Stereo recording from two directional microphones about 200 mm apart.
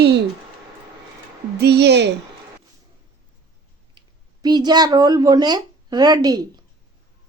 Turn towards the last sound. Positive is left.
turn(degrees=-20)  # may be behind; listen again after turning